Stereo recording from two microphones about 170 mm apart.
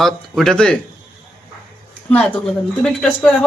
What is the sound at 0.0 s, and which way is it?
Speech, centre (ahead or behind).